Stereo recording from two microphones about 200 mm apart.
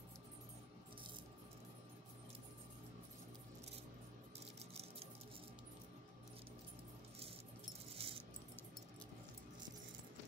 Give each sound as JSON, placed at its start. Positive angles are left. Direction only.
{"t": 7.9, "sound": "keys jangling", "side_deg": -30}